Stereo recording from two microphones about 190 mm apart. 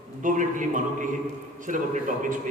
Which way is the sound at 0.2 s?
45° right (ahead or behind).